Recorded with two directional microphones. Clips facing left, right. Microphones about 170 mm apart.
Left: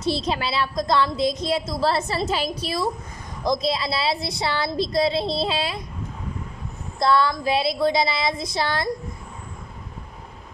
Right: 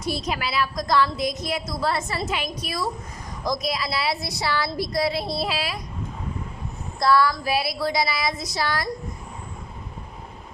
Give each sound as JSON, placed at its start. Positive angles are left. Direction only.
{"t": 0.0, "sound": "a woman's voice", "side_deg": 30}
{"t": 7.0, "sound": "a woman's voice", "side_deg": 25}